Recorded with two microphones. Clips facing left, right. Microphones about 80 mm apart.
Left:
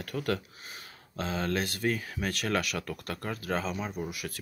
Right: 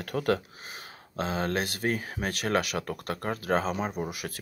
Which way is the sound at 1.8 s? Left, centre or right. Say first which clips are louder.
Right 1 dB; right.